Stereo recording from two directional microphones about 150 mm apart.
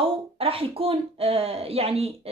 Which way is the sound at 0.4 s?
40° right (ahead or behind).